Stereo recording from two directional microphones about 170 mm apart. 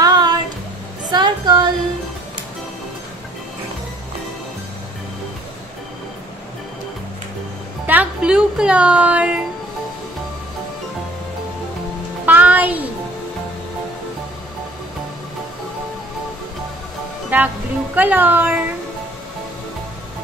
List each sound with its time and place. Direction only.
0.0 s a sound: 25° right (ahead or behind)
7.8 s speech: 10° right (ahead or behind)
12.3 s music: 10° right (ahead or behind)
17.3 s speech: 10° right (ahead or behind)